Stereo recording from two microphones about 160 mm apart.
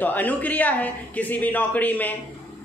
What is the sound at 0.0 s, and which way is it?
A man's voice, 10° left (ahead or behind).